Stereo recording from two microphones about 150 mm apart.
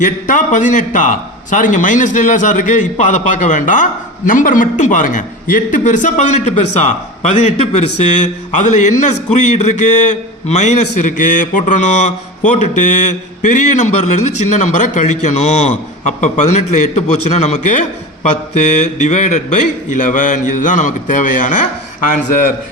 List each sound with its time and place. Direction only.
0.0 s a man's voice: 60° left (ahead or behind)